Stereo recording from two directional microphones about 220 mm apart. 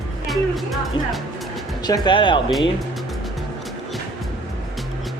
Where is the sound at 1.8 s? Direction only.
20° left (ahead or behind).